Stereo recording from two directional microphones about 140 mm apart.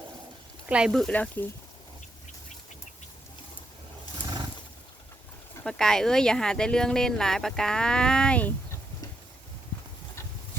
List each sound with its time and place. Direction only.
0.7 s speech: 5° right (ahead or behind)
5.6 s speech: 5° left (ahead or behind)